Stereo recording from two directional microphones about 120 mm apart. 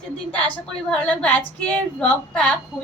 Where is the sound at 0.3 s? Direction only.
10° left (ahead or behind).